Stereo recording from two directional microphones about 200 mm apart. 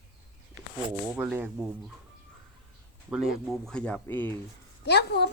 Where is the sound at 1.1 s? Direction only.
10° right (ahead or behind).